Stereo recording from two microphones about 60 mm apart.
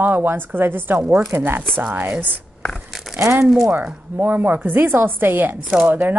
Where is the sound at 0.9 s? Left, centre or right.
Centre.